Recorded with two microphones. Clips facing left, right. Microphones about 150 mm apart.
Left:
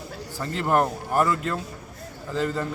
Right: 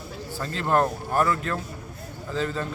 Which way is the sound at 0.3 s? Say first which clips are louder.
Left 1 dB; 15° left (ahead or behind).